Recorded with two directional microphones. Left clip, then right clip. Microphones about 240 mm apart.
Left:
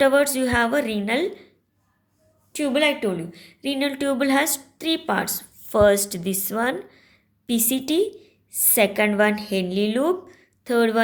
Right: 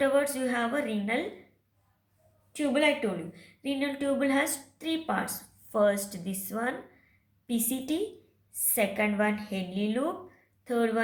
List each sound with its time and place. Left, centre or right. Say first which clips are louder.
0.0 s a woman's voice: left 8 dB; left
2.5 s a woman's voice: left 5 dB; left